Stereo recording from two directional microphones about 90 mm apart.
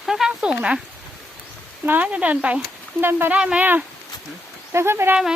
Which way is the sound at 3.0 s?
25° right (ahead or behind).